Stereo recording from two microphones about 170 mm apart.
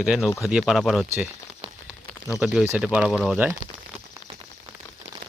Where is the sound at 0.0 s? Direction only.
5° right (ahead or behind).